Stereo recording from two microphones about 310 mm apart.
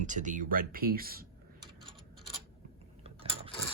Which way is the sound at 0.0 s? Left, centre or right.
Right.